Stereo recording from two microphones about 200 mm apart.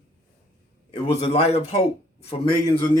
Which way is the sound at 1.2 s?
30° left (ahead or behind).